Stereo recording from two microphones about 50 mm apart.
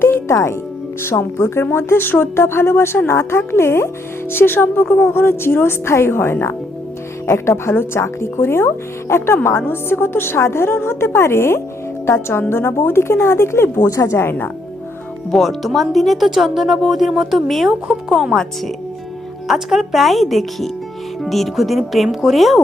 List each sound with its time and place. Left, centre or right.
0.3 s speech: left
1.0 s a woman's voice: left
4.3 s a woman's voice: left
14.3 s a woman's voice: left
15.3 s speech: centre
19.5 s speech: centre